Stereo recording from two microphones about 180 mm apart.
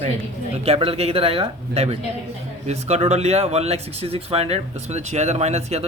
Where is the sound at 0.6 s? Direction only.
30° right (ahead or behind).